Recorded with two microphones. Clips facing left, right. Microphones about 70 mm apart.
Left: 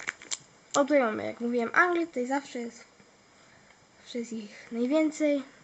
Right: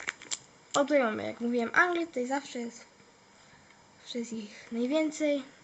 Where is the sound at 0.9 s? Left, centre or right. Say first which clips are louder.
Left 2 dB; left.